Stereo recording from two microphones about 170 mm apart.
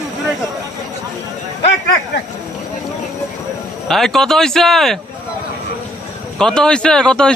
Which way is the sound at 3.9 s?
Centre (ahead or behind).